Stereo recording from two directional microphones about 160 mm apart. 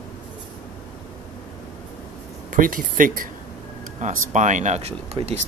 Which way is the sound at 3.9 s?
50° right (ahead or behind).